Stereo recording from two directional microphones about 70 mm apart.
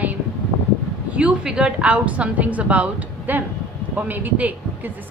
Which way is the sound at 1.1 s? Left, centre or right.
Centre.